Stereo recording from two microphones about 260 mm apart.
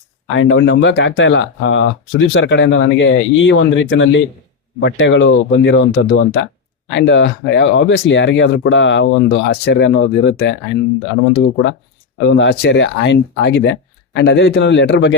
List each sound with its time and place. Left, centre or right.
0.3 s speech: left